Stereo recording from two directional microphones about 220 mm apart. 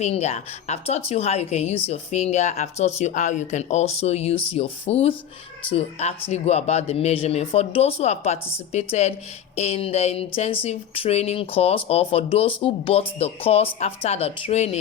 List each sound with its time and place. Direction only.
0.0 s speech: 30° left (ahead or behind)